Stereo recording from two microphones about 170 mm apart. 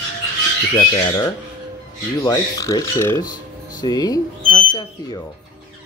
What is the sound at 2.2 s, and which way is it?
Speech, 20° left (ahead or behind).